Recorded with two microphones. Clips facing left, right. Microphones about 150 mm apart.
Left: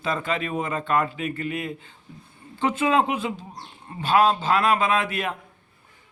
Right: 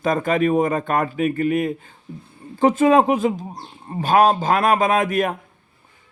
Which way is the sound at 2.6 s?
40° right (ahead or behind).